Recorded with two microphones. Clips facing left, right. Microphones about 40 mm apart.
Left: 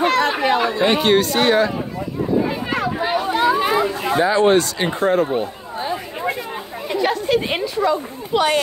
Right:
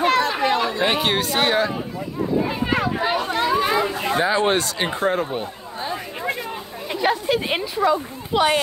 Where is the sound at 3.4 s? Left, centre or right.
Centre.